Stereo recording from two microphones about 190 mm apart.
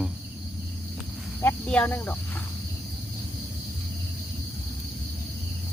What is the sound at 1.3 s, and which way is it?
Speech, 10° left (ahead or behind).